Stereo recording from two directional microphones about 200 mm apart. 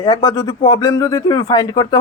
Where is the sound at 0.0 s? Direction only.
20° left (ahead or behind).